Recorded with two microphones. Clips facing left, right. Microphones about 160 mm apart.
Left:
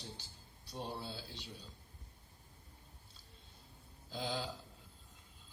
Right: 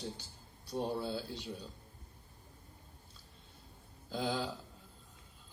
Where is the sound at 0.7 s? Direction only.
50° right (ahead or behind).